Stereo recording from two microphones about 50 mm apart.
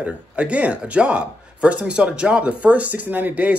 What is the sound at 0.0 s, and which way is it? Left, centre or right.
Speech, right.